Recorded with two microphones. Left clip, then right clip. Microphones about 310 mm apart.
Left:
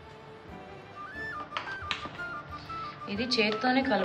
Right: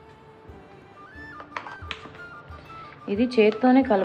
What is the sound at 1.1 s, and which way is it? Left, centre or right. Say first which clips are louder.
Music: left 1 dB; centre.